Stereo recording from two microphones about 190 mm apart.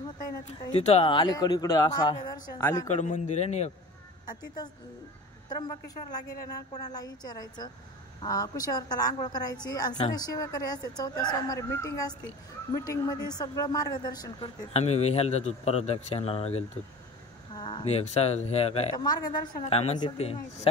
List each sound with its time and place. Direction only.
0.7 s a woman's voice: 35° left (ahead or behind); by 2.9 s 20° left (ahead or behind)
2.9 s a man's voice: 40° left (ahead or behind)
4.3 s a woman's voice: 20° left (ahead or behind)
14.7 s a man's voice: 35° left (ahead or behind)
19.0 s a man's voice: 20° left (ahead or behind)